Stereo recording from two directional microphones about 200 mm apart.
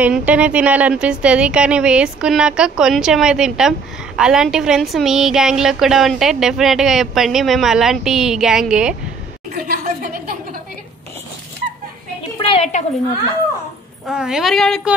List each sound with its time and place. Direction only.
0.0 s a woman's voice: 5° right (ahead or behind)
9.5 s chuckle: 45° right (ahead or behind)
12.4 s a sound: 30° left (ahead or behind)
14.0 s a woman's voice: 5° right (ahead or behind)